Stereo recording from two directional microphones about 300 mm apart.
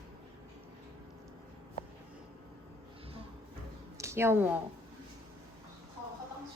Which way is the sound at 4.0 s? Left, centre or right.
Centre.